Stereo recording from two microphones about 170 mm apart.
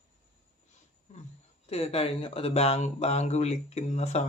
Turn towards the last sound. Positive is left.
turn(degrees=40)  # may be behind; listen again after turning